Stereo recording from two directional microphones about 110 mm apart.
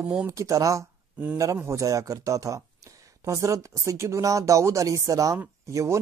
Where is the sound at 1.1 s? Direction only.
10° right (ahead or behind).